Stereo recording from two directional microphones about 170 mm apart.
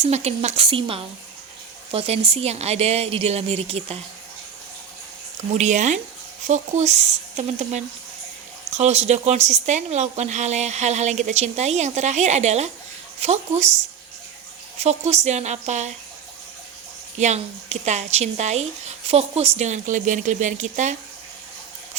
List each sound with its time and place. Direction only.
0.0 s speech: 40° right (ahead or behind)
5.5 s a woman's voice: 45° right (ahead or behind)
17.2 s a woman's voice: 40° right (ahead or behind)